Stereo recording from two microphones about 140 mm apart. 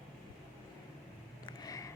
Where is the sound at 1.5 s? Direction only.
25° left (ahead or behind).